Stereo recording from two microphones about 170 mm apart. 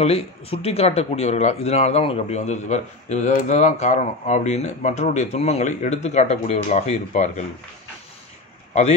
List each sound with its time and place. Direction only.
0.0 s speech: 35° left (ahead or behind)